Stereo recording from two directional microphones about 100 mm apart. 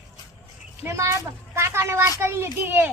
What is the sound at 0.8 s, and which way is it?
Speech, 25° right (ahead or behind).